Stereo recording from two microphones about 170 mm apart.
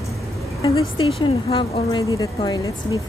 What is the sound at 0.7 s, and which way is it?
A woman's voice, 35° left (ahead or behind).